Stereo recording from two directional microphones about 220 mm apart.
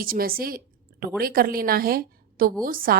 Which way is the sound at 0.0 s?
40° right (ahead or behind).